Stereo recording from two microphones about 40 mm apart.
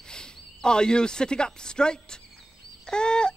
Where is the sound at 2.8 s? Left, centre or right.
Left.